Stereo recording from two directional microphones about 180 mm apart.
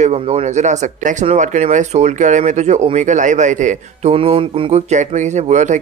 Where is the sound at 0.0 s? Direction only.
35° right (ahead or behind).